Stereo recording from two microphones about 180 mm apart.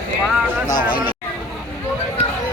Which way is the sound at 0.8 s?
50° left (ahead or behind).